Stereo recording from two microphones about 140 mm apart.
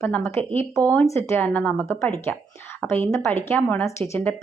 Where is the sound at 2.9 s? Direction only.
20° left (ahead or behind).